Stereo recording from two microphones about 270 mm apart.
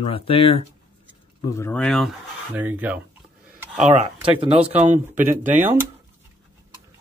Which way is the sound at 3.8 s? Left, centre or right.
Right.